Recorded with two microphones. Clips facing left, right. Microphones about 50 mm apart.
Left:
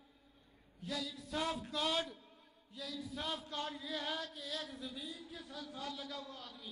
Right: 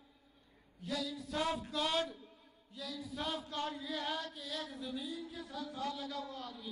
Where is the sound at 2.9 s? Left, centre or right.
Right.